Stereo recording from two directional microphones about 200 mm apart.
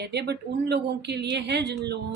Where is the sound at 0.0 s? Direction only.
55° right (ahead or behind).